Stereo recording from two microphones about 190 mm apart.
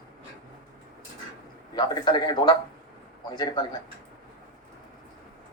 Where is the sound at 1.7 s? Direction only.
20° left (ahead or behind).